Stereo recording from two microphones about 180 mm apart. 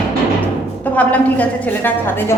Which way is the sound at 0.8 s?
10° left (ahead or behind).